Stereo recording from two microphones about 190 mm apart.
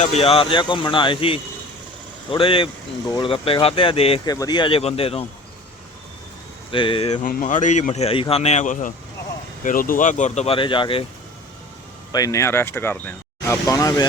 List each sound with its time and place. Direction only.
0.0 s speech: 35° left (ahead or behind)
6.7 s speech: 25° left (ahead or behind)
7.3 s speech: 45° left (ahead or behind); by 11.0 s 25° left (ahead or behind)
12.1 s speech: 20° left (ahead or behind)